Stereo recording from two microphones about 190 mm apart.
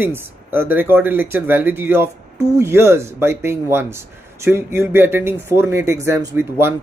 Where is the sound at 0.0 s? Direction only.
10° right (ahead or behind).